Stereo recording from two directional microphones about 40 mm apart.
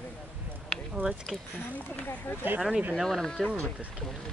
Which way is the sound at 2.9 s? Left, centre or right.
Centre.